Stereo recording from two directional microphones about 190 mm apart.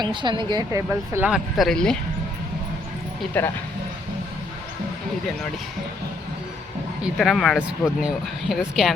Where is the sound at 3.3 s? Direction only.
10° left (ahead or behind).